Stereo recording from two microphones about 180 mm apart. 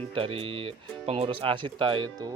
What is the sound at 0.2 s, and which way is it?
Speech, 30° right (ahead or behind).